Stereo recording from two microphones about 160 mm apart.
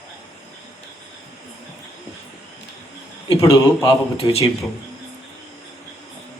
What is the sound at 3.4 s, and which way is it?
A man's voice, 35° left (ahead or behind).